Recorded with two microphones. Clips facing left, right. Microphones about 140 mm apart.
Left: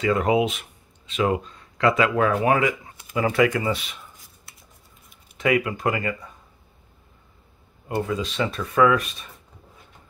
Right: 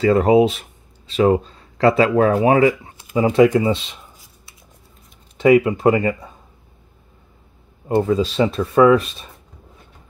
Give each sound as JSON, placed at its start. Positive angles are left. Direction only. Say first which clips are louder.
{"t": 0.0, "sound": "speech", "louder": "right 7 dB", "side_deg": -35}
{"t": 5.4, "sound": "speech", "louder": "right 9 dB", "side_deg": -30}
{"t": 7.9, "sound": "speech", "louder": "right 9 dB", "side_deg": -30}